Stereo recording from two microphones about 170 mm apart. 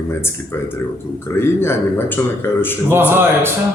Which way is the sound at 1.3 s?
15° left (ahead or behind).